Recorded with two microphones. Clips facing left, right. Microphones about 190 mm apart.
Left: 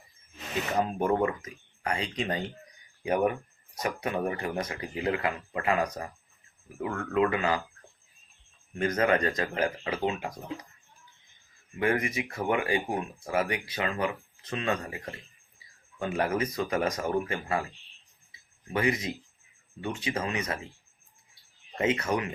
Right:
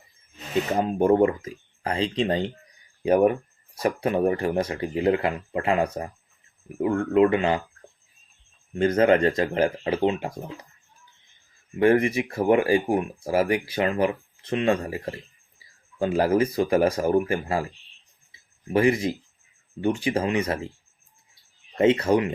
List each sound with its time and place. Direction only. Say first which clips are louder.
0.8 s speech: right 7 dB; 30° right (ahead or behind)
8.7 s speech: right 7 dB; 30° right (ahead or behind)
11.8 s speech: right 9 dB; 30° right (ahead or behind)
18.7 s speech: right 8 dB; 30° right (ahead or behind)
21.8 s speech: right 8 dB; 30° right (ahead or behind)